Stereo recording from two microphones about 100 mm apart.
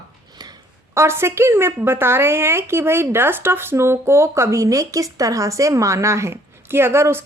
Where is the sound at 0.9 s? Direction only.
25° right (ahead or behind).